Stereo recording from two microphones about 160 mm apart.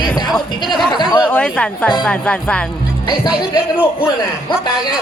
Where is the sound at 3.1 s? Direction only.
25° left (ahead or behind).